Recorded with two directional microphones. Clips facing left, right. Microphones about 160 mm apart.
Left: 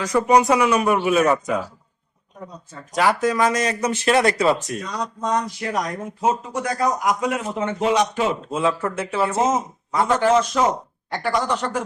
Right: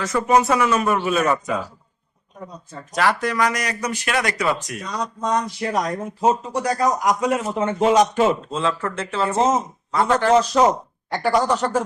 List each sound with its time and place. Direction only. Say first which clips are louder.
0.0 s speech: left 1 dB; 15° left (ahead or behind)
2.9 s speech: left 2 dB; 15° left (ahead or behind)
5.5 s speech: right 2 dB; 30° right (ahead or behind)
8.4 s speech: left 2 dB; 15° left (ahead or behind)
10.3 s speech: right 3 dB; 35° right (ahead or behind)